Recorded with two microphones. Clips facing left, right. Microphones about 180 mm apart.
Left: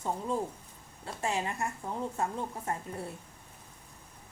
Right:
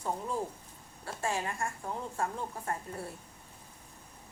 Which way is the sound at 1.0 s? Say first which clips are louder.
Left 1 dB; 20° left (ahead or behind).